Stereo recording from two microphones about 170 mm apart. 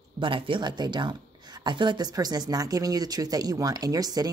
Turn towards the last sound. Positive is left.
turn(degrees=-20)  # may be behind; listen again after turning